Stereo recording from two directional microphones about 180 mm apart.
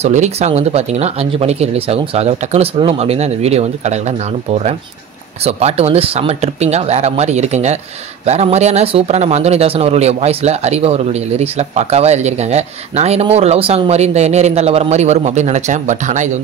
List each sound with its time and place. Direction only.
0.0 s speech: 40° right (ahead or behind)